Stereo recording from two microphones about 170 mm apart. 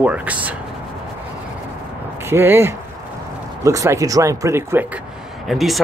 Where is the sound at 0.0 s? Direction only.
10° right (ahead or behind).